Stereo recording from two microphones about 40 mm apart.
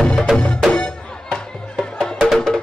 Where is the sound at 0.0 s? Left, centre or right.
Left.